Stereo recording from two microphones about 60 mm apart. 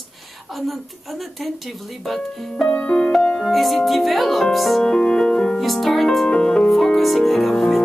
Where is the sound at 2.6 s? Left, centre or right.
Centre.